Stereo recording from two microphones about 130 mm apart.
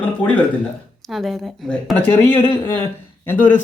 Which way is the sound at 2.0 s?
15° left (ahead or behind).